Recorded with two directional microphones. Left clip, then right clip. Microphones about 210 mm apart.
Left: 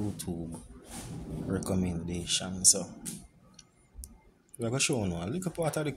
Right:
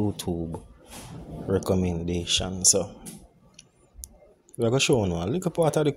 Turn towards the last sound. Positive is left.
turn(degrees=-35)  # may be behind; listen again after turning